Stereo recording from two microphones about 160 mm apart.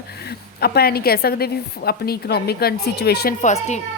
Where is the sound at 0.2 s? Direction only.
85° left.